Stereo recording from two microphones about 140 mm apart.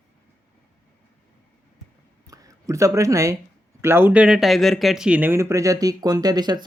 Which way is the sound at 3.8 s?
15° right (ahead or behind).